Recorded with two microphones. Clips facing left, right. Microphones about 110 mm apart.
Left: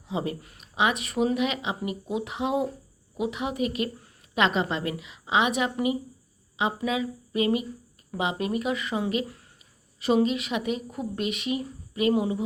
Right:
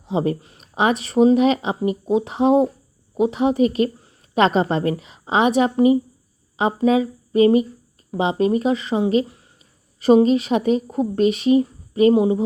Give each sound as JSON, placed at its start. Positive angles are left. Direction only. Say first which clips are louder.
{"t": 0.0, "sound": "speech", "louder": "right 9 dB", "side_deg": -30}
{"t": 9.2, "sound": "a sound", "louder": "even", "side_deg": -20}
{"t": 10.0, "sound": "speech", "louder": "right 9 dB", "side_deg": -40}